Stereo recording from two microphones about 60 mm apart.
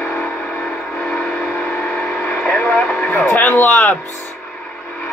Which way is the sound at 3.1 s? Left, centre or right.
Left.